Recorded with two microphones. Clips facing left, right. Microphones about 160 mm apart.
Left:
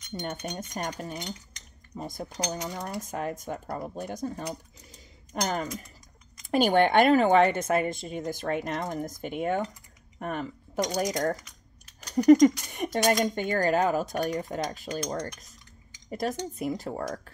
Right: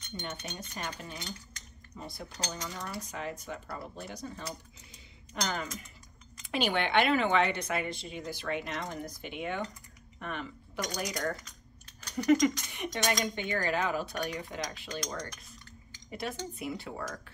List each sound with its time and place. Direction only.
0.1 s speech: 45° left (ahead or behind)
3.0 s speech: 45° left (ahead or behind)
12.2 s speech: 40° left (ahead or behind)